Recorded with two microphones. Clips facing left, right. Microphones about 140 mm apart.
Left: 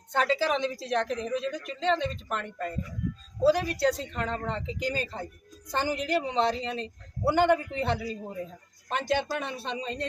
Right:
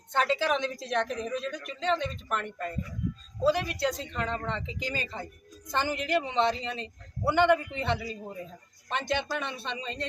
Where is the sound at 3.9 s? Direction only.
Centre (ahead or behind).